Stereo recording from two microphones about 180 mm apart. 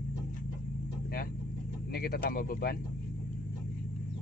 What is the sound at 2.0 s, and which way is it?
Speech, 60° left (ahead or behind).